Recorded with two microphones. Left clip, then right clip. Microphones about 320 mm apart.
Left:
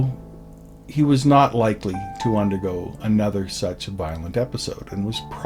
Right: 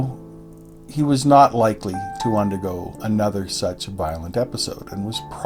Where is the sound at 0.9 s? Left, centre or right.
Centre.